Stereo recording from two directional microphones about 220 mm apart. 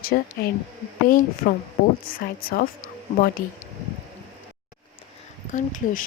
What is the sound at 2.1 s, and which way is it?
Speech, 40° left (ahead or behind).